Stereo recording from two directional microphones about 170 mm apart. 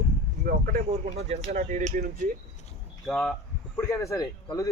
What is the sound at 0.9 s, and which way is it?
Speech, 40° right (ahead or behind).